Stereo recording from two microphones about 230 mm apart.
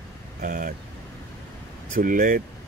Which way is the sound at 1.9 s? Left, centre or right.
Right.